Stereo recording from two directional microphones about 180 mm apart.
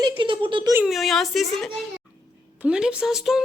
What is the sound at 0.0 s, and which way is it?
Speech, 25° right (ahead or behind).